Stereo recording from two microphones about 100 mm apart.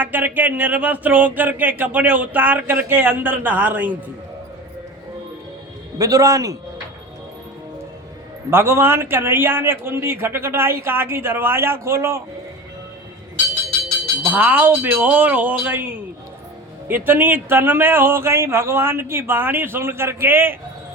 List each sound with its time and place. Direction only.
0.0 s speech: 15° right (ahead or behind)
6.0 s a man's voice: 35° right (ahead or behind)
8.4 s a man's voice: 25° right (ahead or behind)
14.3 s a man's voice: 15° right (ahead or behind)